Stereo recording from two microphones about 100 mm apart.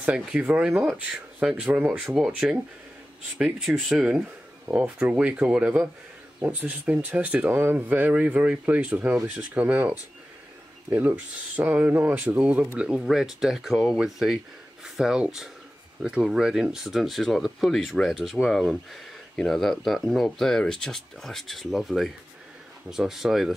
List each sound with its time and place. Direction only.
0.0 s speech: 10° right (ahead or behind)
3.6 s speech: centre (ahead or behind)
4.6 s speech: 20° right (ahead or behind); by 23.5 s 5° right (ahead or behind)